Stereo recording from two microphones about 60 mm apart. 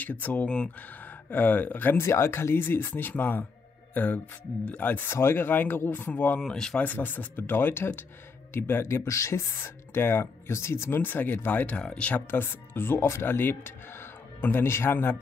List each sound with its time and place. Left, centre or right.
0.0 s speech: left
0.5 s speech: centre
1.3 s speech: left
2.0 s speech: left
5.0 s speech: left
6.4 s speech: centre
6.8 s speech: left
8.8 s speech: left
9.6 s speech: left; by 12.2 s centre
12.3 s speech: left